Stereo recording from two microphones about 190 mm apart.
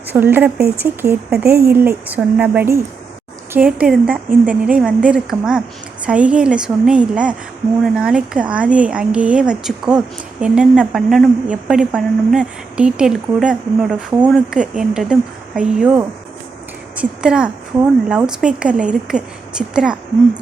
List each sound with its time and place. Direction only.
0.1 s speech: 10° right (ahead or behind)
1.3 s speech: 55° right (ahead or behind)
2.0 s a woman's voice: 5° right (ahead or behind)